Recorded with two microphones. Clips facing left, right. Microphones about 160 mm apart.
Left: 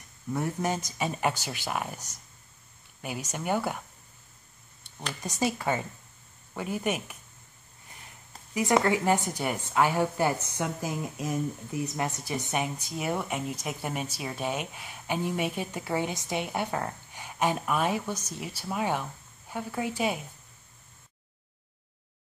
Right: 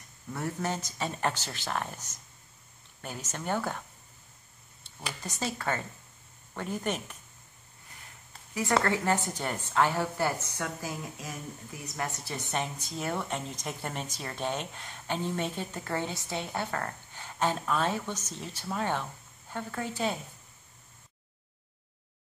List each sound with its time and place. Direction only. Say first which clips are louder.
0.3 s speech: left 4 dB; 15° left (ahead or behind)
5.2 s speech: left 5 dB; 15° left (ahead or behind)
8.5 s a woman's voice: left 3 dB; 15° left (ahead or behind)
12.9 s speech: left 2 dB; centre (ahead or behind)